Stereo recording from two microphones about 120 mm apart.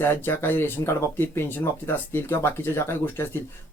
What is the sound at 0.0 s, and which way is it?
Speech, 15° left (ahead or behind).